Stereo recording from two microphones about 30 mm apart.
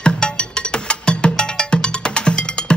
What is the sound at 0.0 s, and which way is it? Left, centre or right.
Music, left.